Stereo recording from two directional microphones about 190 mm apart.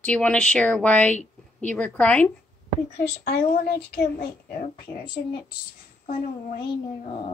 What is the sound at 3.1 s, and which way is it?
Speech, 55° left (ahead or behind).